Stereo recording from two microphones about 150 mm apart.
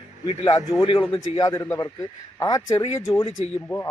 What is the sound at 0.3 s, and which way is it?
Speech, 25° left (ahead or behind).